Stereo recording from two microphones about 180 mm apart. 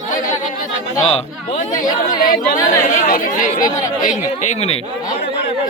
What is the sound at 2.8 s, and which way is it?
A man's voice, 45° left (ahead or behind).